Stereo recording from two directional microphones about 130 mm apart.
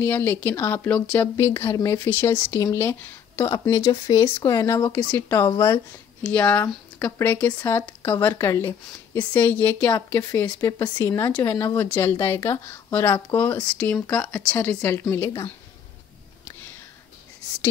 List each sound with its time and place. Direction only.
0.0 s speech: 15° left (ahead or behind)
1.3 s speech: 25° left (ahead or behind)